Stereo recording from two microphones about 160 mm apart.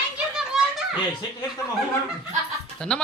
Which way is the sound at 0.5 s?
5° right (ahead or behind).